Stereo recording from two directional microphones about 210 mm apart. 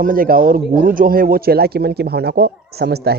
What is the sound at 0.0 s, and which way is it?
Speech, 40° right (ahead or behind).